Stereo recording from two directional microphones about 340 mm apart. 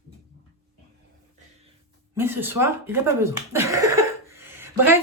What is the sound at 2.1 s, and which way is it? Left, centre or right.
Speech, centre.